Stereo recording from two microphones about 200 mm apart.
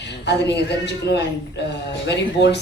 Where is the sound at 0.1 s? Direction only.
60° left (ahead or behind).